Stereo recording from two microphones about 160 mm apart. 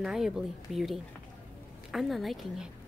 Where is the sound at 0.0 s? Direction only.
Centre (ahead or behind).